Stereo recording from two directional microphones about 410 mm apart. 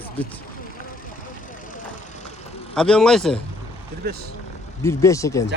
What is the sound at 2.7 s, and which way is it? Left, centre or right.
Speech, centre.